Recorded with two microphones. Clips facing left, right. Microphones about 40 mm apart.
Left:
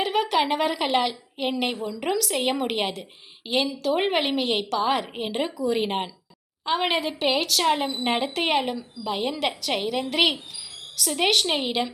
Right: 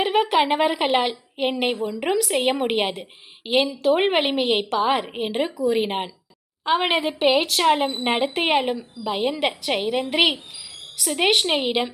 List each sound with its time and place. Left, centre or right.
0.0 s a woman's voice: right